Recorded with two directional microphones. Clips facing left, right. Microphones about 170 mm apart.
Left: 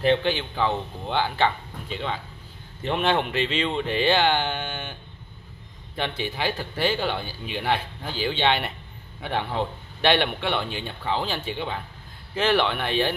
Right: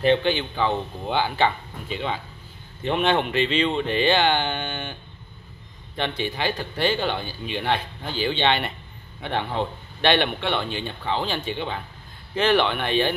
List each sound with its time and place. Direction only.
0.0 s speech: centre (ahead or behind)
5.9 s speech: 5° left (ahead or behind)